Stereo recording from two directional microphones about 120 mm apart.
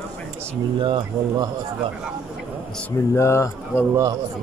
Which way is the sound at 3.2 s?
25° left (ahead or behind).